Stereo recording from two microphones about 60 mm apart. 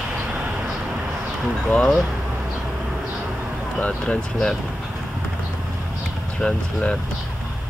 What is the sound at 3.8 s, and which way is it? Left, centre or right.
Speech, left.